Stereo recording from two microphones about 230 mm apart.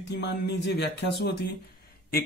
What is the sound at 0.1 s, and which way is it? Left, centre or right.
Speech, left.